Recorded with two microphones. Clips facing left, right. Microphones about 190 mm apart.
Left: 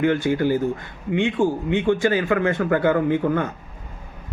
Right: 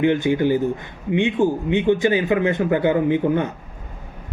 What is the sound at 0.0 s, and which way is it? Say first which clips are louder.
A man's voice: right 2 dB; 20° right (ahead or behind).